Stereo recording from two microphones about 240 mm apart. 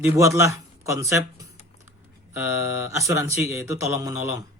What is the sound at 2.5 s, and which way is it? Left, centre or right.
Speech, left.